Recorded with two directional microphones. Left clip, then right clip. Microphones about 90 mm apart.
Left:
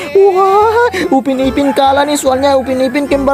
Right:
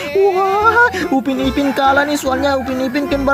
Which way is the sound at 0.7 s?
55° left (ahead or behind).